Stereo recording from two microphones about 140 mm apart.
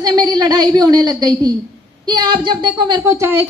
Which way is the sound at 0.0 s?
30° right (ahead or behind).